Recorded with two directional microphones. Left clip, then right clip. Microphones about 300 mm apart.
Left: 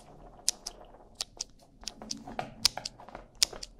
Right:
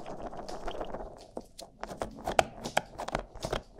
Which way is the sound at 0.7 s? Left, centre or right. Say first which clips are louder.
Right 14 dB; right.